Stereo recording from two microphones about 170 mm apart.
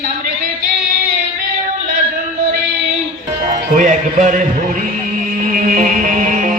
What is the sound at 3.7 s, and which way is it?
Music, 50° right (ahead or behind).